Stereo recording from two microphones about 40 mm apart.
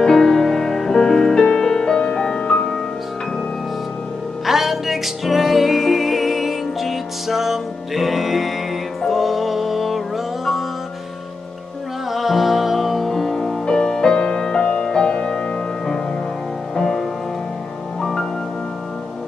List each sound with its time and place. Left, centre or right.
0.0 s music: centre
2.0 s music: left
4.5 s music: centre
12.1 s music: centre
13.7 s music: centre